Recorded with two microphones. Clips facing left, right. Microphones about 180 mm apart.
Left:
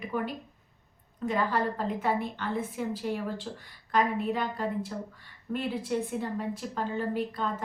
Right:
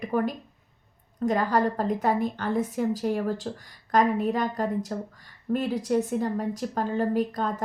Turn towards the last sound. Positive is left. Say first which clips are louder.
# right 5 dB
turn(degrees=-40)  # may be behind; listen again after turning